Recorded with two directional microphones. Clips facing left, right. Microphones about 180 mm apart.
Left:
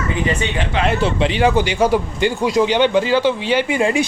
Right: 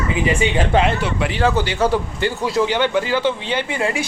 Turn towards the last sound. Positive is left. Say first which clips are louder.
# left 5 dB
turn(degrees=20)  # may be behind; listen again after turning